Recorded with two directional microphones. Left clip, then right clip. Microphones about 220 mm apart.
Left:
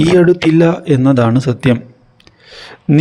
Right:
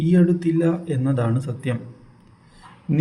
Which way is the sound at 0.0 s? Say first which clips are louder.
Left 11 dB; 50° left (ahead or behind).